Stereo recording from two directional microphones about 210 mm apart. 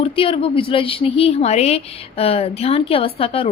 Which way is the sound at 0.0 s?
25° left (ahead or behind).